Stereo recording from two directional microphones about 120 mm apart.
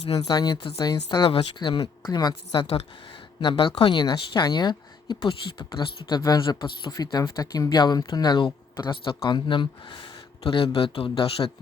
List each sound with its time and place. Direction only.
0.3 s a woman's voice: 35° left (ahead or behind)
1.2 s a woman's voice: 45° left (ahead or behind)
3.4 s a woman's voice: 45° left (ahead or behind)